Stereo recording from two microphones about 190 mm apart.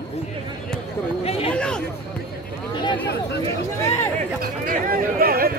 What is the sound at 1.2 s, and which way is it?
Speech, 30° left (ahead or behind).